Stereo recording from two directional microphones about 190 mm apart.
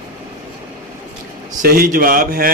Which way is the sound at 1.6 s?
50° right (ahead or behind).